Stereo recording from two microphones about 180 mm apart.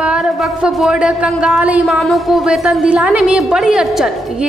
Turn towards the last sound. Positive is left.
turn(degrees=-5)  # may be behind; listen again after turning